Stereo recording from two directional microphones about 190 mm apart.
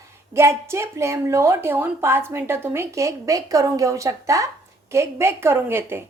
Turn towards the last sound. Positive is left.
turn(degrees=-10)  # may be behind; listen again after turning